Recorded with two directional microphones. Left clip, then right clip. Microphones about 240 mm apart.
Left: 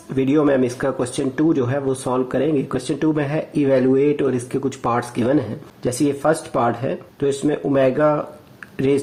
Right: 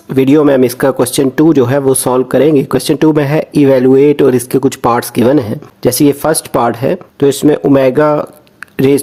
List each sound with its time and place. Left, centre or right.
0.1 s speech: right